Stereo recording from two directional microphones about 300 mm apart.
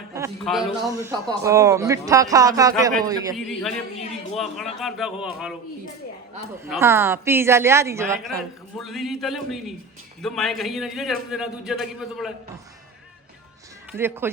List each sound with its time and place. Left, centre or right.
0.4 s a man's voice: centre
0.9 s speech: centre
3.3 s a man's voice: centre
6.7 s a man's voice: centre
13.9 s speech: centre